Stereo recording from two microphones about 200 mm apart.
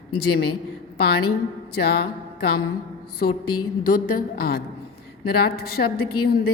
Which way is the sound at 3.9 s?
45° left (ahead or behind).